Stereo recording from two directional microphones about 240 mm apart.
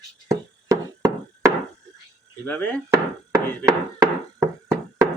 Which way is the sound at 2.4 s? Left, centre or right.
Centre.